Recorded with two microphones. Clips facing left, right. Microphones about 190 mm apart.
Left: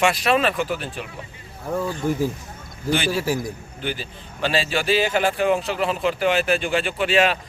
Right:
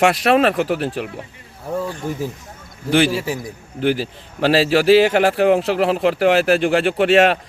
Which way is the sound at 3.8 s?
75° right (ahead or behind).